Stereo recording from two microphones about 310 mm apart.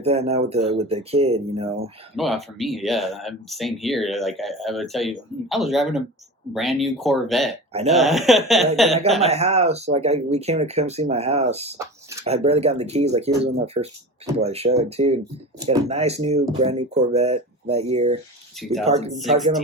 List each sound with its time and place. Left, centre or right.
0.0 s speech: centre
2.1 s speech: centre
7.7 s speech: centre
7.9 s speech: centre
9.2 s speech: centre
18.6 s speech: centre
18.9 s speech: right
19.1 s speech: centre